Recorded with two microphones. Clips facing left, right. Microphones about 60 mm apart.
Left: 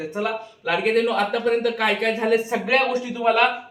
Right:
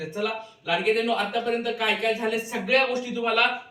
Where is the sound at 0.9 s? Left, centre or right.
Left.